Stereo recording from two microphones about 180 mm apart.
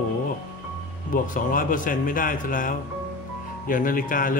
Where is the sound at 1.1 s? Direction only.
50° left (ahead or behind).